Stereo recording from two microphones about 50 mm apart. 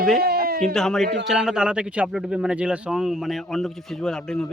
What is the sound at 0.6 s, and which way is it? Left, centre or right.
Speech, centre.